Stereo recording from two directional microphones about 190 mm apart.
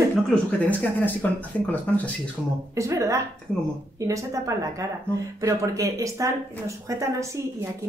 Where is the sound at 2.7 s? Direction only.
15° right (ahead or behind).